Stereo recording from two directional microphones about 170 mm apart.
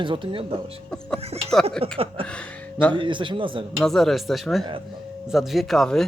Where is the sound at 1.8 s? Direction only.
35° right (ahead or behind).